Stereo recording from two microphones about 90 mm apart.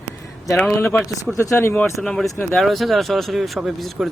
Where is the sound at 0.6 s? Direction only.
15° left (ahead or behind).